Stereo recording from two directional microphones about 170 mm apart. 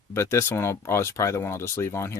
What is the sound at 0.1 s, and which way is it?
Speech, 15° left (ahead or behind).